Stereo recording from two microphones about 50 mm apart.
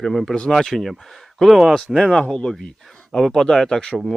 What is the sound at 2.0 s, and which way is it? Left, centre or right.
Speech, centre.